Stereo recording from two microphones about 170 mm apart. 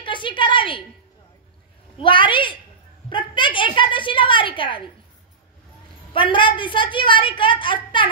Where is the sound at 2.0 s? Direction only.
30° left (ahead or behind).